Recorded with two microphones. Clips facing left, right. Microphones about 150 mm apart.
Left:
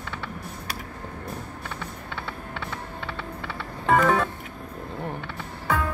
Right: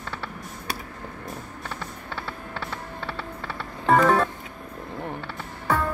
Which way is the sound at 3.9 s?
20° right (ahead or behind).